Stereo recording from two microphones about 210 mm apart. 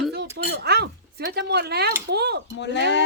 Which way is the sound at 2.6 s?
55° left (ahead or behind).